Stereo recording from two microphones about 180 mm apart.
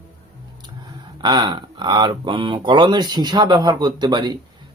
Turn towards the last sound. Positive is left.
turn(degrees=-25)  # may be behind; listen again after turning